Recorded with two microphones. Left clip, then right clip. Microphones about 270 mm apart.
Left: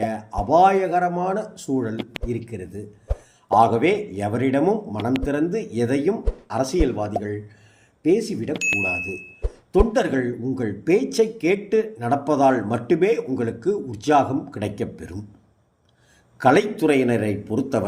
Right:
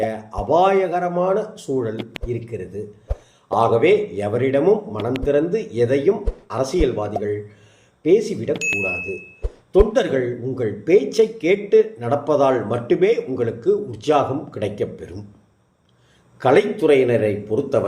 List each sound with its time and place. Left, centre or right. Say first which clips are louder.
0.0 s speech: right 2 dB; left
2.0 s speech: right 1 dB; centre
2.3 s speech: right 5 dB; left
3.1 s a sound: even; centre
3.5 s speech: right 1 dB; left
8.5 s speech: left 2 dB; centre
8.8 s speech: right 1 dB; left
9.4 s a sound: even; centre
9.9 s speech: right 3 dB; left
16.4 s speech: right 2 dB; left